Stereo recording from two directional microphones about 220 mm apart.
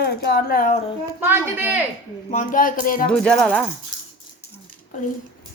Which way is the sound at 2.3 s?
35° left (ahead or behind).